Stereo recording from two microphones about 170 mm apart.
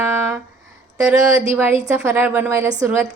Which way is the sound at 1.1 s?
15° right (ahead or behind).